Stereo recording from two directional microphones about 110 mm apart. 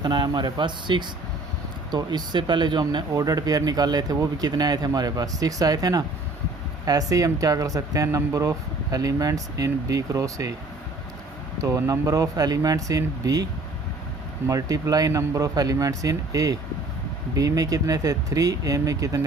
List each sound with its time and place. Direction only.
0.0 s speech: 45° right (ahead or behind)
11.6 s speech: 30° right (ahead or behind)